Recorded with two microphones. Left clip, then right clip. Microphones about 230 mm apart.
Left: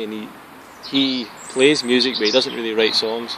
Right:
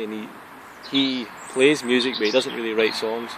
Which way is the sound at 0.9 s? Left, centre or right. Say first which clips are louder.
Left 3 dB; right.